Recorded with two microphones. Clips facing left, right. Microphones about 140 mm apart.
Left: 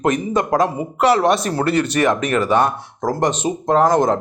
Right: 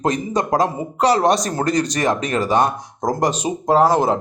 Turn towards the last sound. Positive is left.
turn(degrees=-10)  # may be behind; listen again after turning